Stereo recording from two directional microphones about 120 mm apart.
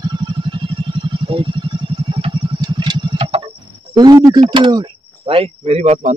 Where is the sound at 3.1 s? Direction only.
45° right (ahead or behind).